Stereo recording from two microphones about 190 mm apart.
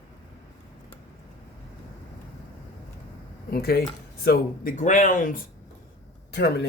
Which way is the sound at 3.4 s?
55° left (ahead or behind).